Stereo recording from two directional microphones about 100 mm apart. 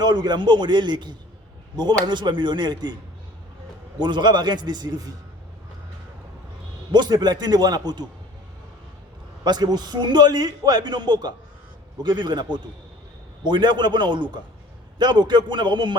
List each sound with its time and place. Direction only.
0.0 s a man's voice: 45° right (ahead or behind)
4.0 s a man's voice: 50° right (ahead or behind)
6.9 s a man's voice: 45° right (ahead or behind)
9.4 s a man's voice: 45° right (ahead or behind)